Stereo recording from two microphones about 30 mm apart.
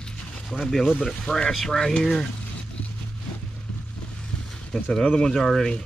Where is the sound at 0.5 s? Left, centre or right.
Centre.